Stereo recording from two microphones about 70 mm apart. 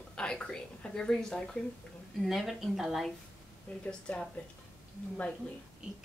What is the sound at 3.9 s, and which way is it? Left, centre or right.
Speech, centre.